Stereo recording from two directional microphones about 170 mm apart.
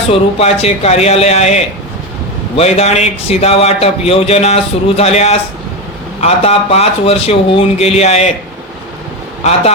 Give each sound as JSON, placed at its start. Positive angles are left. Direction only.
{"t": 0.1, "sound": "a man's voice", "side_deg": 35}
{"t": 9.4, "sound": "a man's voice", "side_deg": 40}